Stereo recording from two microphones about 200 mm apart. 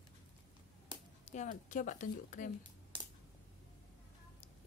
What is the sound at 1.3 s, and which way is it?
A woman's voice, 35° left (ahead or behind).